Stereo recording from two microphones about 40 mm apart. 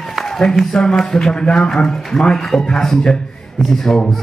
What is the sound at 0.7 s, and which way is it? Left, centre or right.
A man's voice, centre.